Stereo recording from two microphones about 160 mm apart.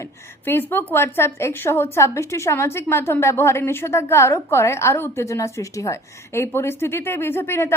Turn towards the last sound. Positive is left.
turn(degrees=15)  # may be behind; listen again after turning